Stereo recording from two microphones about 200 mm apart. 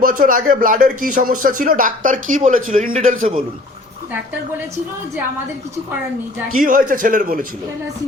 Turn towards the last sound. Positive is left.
turn(degrees=-45)  # may be behind; listen again after turning